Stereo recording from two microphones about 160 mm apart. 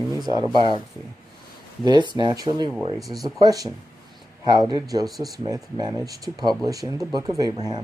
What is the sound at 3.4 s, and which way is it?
Speech, 20° right (ahead or behind).